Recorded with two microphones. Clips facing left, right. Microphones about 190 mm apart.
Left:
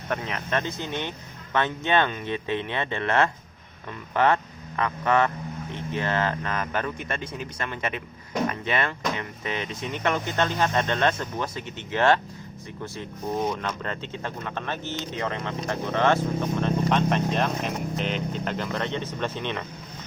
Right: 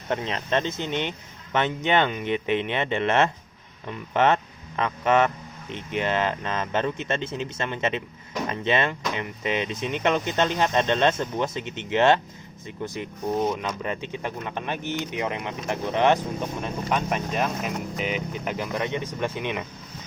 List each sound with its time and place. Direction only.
0.1 s speech: 25° right (ahead or behind)